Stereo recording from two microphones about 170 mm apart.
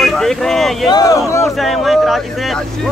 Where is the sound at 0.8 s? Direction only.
20° left (ahead or behind).